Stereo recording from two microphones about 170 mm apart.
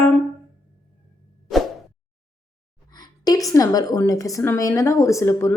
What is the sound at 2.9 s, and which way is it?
A woman's voice, 25° left (ahead or behind).